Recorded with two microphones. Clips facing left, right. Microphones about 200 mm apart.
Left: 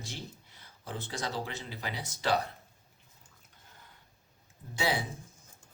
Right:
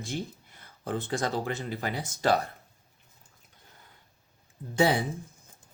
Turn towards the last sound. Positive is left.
turn(degrees=-55)  # may be behind; listen again after turning